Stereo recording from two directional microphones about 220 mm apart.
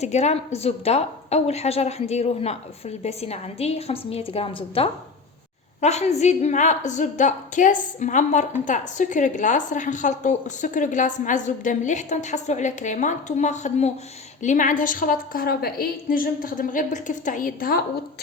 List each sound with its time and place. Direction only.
0.0 s a woman's voice: 30° left (ahead or behind)